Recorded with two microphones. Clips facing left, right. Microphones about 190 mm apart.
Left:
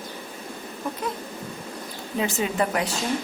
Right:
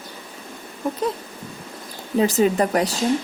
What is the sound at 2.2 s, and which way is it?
Speech, 40° right (ahead or behind).